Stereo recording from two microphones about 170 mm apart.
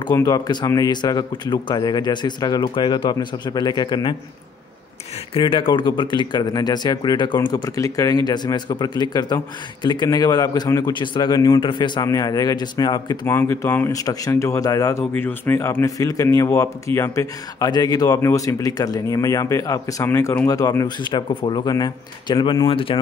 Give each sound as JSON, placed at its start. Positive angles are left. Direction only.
{"t": 0.1, "sound": "a man's voice", "side_deg": 20}
{"t": 5.3, "sound": "a man's voice", "side_deg": 30}
{"t": 13.3, "sound": "a man's voice", "side_deg": 15}